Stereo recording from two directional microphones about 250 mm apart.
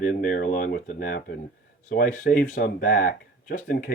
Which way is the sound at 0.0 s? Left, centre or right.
Left.